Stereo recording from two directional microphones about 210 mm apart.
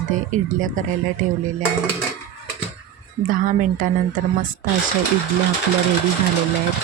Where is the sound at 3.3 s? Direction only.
40° right (ahead or behind).